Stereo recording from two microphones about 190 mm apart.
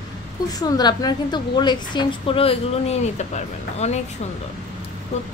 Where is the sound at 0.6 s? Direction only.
20° left (ahead or behind); by 4.0 s 35° left (ahead or behind).